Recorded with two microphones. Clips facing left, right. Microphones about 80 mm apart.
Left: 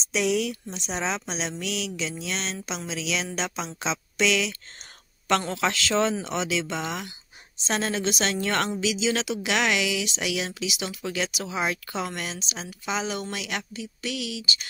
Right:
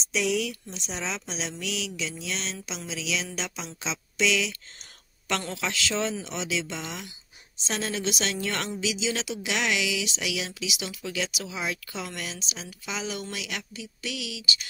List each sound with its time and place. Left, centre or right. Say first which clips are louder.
0.1 s a woman's voice: left 2 dB; left
5.5 s a woman's voice: left 5 dB; left